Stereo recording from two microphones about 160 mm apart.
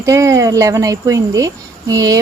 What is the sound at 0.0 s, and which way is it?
Speech, 20° right (ahead or behind).